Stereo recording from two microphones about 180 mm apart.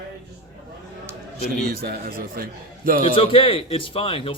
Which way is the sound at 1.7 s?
55° right (ahead or behind).